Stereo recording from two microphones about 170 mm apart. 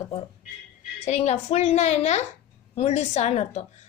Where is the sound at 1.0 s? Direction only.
40° left (ahead or behind).